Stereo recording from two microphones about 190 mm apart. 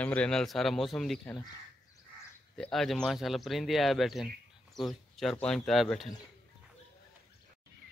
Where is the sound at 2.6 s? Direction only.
Centre (ahead or behind).